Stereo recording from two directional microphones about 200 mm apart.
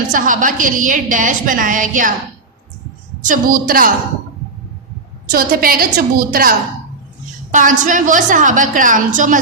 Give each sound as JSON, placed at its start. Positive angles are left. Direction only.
{"t": 0.1, "sound": "a woman's voice", "side_deg": -40}
{"t": 3.2, "sound": "a woman's voice", "side_deg": -45}
{"t": 5.3, "sound": "a woman's voice", "side_deg": -45}
{"t": 7.5, "sound": "a woman's voice", "side_deg": -40}